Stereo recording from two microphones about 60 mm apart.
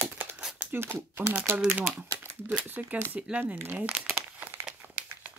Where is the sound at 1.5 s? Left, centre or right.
Right.